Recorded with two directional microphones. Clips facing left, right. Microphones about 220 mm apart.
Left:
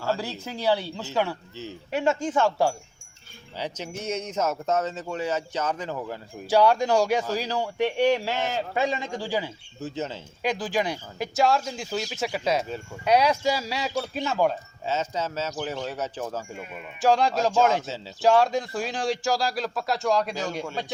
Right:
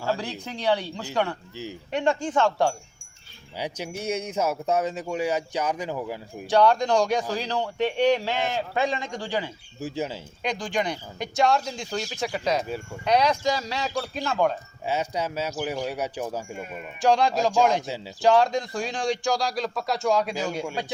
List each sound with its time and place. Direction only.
0.4 s a man's voice: 5° left (ahead or behind)
3.6 s speech: 10° right (ahead or behind)
6.5 s a man's voice: 10° left (ahead or behind)
9.8 s speech: 10° right (ahead or behind)
10.4 s a man's voice: 5° left (ahead or behind)
14.8 s speech: 15° right (ahead or behind)
16.6 s speech: centre (ahead or behind)
17.8 s speech: 15° right (ahead or behind)
18.2 s speech: centre (ahead or behind)